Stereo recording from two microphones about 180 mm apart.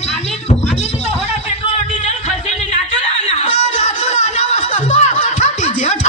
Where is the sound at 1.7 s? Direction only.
35° left (ahead or behind).